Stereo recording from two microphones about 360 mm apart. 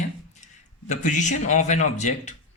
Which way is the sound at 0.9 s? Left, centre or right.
Centre.